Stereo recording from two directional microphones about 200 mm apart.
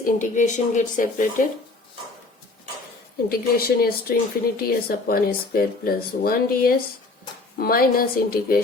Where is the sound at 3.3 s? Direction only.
50° left (ahead or behind).